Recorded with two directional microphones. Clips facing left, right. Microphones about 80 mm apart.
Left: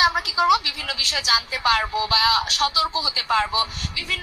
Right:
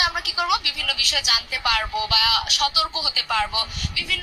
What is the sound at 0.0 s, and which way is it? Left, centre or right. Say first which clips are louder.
A woman's voice: left 5 dB; left.